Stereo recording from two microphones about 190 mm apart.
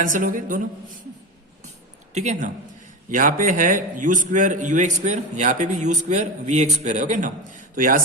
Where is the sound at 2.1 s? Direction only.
40° right (ahead or behind).